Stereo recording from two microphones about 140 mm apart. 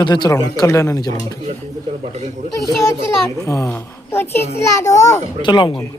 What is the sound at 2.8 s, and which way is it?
A child's voice, 20° left (ahead or behind).